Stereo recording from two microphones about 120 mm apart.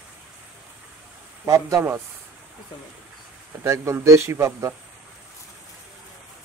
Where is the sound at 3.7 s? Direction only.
25° right (ahead or behind).